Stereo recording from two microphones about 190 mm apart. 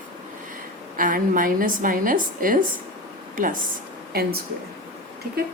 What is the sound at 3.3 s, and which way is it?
Speech, 45° right (ahead or behind).